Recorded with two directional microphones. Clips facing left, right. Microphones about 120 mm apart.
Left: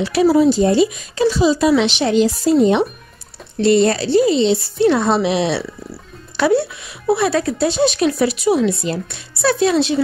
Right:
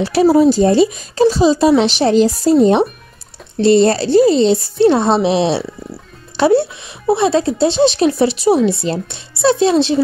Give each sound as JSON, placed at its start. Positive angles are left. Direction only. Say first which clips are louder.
{"t": 0.0, "sound": "speech", "louder": "right 2 dB", "side_deg": -35}